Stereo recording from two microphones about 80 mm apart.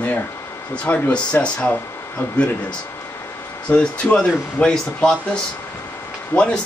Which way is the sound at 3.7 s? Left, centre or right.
Centre.